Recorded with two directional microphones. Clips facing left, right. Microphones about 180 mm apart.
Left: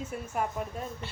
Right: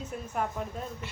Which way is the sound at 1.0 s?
30° left (ahead or behind).